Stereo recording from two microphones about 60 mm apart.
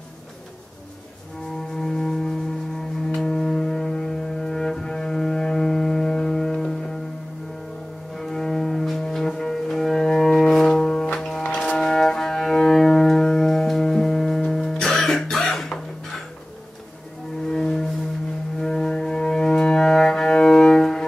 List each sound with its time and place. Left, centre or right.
1.7 s music: centre
8.1 s cello: centre
11.1 s music: centre
11.4 s music: centre
11.8 s music: centre
17.5 s music: centre